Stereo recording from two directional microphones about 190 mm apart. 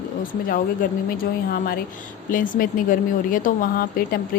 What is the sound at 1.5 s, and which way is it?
Speech, 50° left (ahead or behind).